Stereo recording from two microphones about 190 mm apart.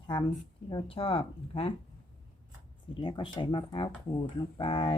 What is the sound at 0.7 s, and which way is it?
Speech, 25° left (ahead or behind).